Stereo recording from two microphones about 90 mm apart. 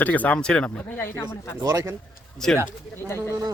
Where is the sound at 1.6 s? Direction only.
35° right (ahead or behind).